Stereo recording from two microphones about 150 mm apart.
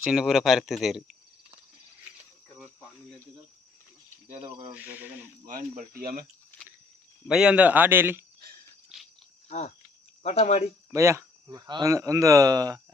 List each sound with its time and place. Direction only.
0.0 s speech: centre (ahead or behind)
4.4 s speech: 35° right (ahead or behind)
4.7 s speech: 10° right (ahead or behind)
5.5 s speech: 65° right (ahead or behind)
6.5 s a sound: 15° left (ahead or behind)
7.3 s speech: 5° right (ahead or behind)
8.9 s cricket: centre (ahead or behind)
9.5 s speech: 50° left (ahead or behind)
10.9 s speech: 20° right (ahead or behind)